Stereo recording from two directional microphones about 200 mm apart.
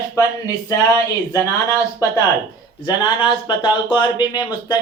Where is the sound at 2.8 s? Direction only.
25° left (ahead or behind).